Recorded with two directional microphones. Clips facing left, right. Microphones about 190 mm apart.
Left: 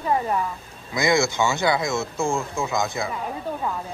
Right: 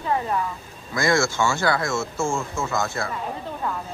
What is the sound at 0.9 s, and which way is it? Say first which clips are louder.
Speech: left 1 dB; 20° left (ahead or behind).